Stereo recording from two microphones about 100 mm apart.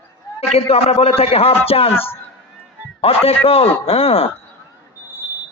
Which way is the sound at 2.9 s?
75° left (ahead or behind).